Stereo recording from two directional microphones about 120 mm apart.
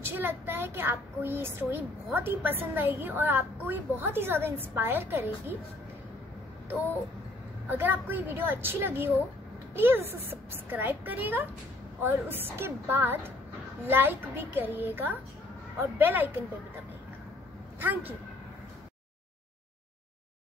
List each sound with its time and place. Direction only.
0.0 s a woman's voice: 20° right (ahead or behind)
7.7 s a woman's voice: 15° right (ahead or behind)
17.7 s a woman's voice: 15° right (ahead or behind)